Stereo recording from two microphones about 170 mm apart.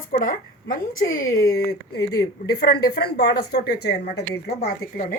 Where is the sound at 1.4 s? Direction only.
70° left (ahead or behind).